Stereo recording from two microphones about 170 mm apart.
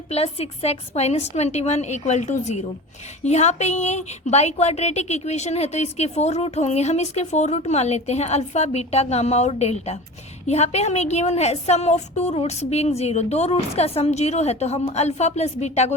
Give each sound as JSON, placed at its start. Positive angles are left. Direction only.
{"t": 0.1, "sound": "a woman's voice", "side_deg": 35}